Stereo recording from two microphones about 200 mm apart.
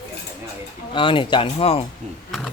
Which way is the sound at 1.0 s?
25° left (ahead or behind).